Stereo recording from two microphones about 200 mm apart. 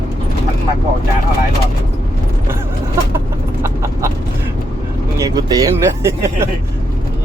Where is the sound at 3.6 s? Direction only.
15° right (ahead or behind).